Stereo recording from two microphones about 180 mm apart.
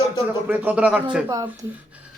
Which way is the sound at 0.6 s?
10° right (ahead or behind).